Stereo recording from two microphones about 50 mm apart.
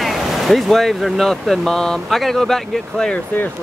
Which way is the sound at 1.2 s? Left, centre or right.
Centre.